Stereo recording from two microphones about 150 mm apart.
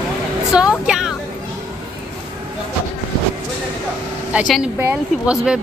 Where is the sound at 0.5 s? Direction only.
5° right (ahead or behind).